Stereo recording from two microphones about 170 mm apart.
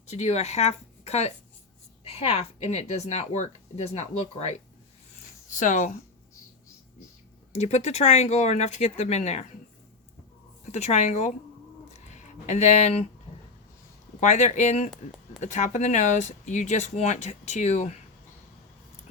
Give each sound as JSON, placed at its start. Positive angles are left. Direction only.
{"t": 0.1, "sound": "speech", "side_deg": 40}
{"t": 7.5, "sound": "speech", "side_deg": 40}
{"t": 10.7, "sound": "speech", "side_deg": 40}
{"t": 11.9, "sound": "a sound", "side_deg": 45}
{"t": 14.2, "sound": "speech", "side_deg": 45}